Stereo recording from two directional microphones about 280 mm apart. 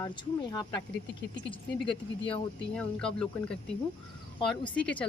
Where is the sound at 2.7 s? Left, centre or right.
Centre.